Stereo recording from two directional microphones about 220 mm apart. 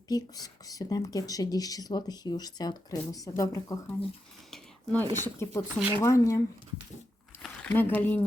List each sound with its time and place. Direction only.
0.1 s speech: 15° left (ahead or behind)
4.5 s a sound: 5° left (ahead or behind)
5.2 s speech: 10° left (ahead or behind)